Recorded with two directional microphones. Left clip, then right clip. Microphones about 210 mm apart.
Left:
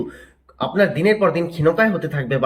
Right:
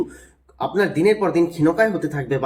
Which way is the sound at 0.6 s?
15° right (ahead or behind).